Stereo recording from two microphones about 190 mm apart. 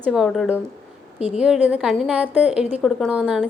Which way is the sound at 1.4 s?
5° right (ahead or behind).